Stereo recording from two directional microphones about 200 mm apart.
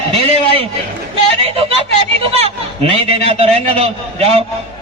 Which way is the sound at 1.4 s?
30° right (ahead or behind).